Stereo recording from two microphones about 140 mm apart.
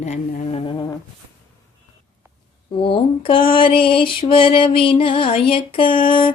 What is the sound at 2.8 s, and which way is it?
Mantra, 40° left (ahead or behind).